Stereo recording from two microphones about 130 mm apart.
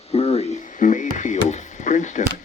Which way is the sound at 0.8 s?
75° left (ahead or behind).